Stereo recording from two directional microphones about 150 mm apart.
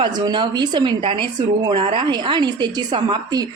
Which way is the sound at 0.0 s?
30° right (ahead or behind).